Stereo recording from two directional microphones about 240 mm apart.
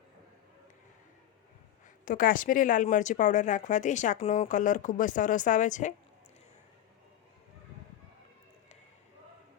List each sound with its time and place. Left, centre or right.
2.0 s speech: left